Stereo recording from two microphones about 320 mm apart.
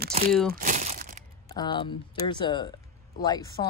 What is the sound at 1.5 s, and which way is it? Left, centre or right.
Speech, centre.